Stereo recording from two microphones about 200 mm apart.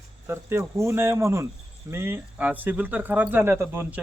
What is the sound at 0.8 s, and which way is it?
Speech, 10° right (ahead or behind).